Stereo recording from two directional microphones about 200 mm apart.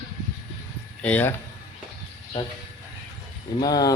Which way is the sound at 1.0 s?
10° left (ahead or behind).